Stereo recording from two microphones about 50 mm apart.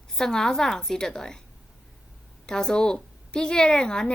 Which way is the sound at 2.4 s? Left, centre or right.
Centre.